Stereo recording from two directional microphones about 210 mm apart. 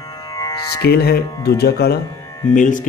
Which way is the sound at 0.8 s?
50° left (ahead or behind).